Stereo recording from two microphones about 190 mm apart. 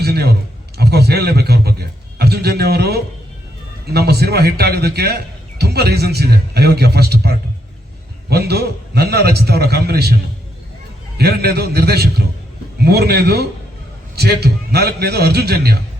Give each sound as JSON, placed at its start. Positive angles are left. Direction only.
{"t": 0.0, "sound": "a man's voice", "side_deg": -55}
{"t": 11.2, "sound": "a man's voice", "side_deg": -55}